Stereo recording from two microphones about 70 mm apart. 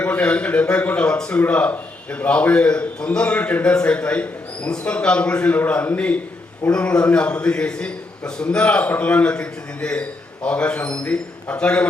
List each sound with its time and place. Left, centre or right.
0.0 s a man's voice: centre